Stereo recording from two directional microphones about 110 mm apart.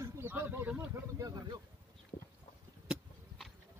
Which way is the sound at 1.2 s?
35° right (ahead or behind).